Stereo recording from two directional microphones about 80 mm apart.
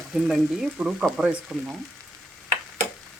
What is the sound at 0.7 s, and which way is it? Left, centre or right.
Speech, centre.